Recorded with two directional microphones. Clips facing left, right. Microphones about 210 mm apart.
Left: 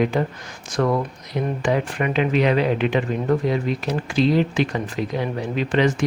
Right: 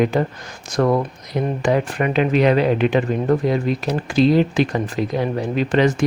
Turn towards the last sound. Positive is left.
turn(degrees=-45)  # may be behind; listen again after turning